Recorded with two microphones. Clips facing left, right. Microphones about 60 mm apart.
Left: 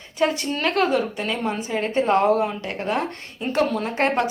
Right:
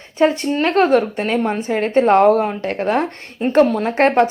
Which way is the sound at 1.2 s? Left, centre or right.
Right.